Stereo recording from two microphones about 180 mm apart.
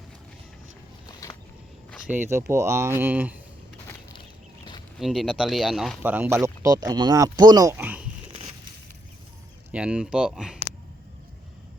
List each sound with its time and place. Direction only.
1.0 s a sound: 20° left (ahead or behind)
2.0 s speech: 10° right (ahead or behind)
4.9 s speech: centre (ahead or behind)
9.7 s speech: 5° right (ahead or behind)